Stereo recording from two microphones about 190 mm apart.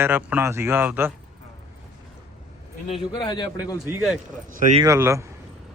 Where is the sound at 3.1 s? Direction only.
20° left (ahead or behind).